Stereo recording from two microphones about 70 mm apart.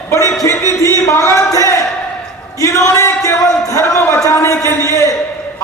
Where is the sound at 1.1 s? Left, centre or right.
Left.